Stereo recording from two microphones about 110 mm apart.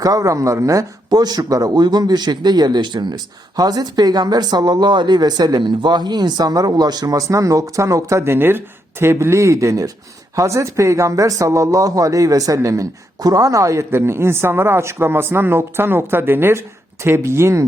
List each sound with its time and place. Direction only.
0.0 s speech: 30° right (ahead or behind)